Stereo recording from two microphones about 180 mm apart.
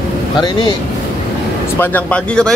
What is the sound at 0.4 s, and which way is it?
Speech, 25° left (ahead or behind).